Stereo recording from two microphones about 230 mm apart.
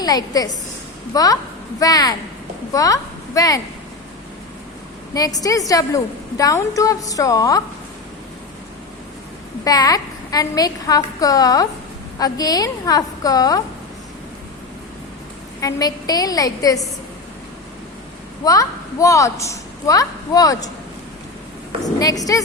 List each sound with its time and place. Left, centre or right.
0.0 s a woman's voice: centre
5.1 s a woman's voice: centre
9.6 s a woman's voice: centre
15.6 s a woman's voice: centre
18.4 s a woman's voice: centre
21.9 s a woman's voice: centre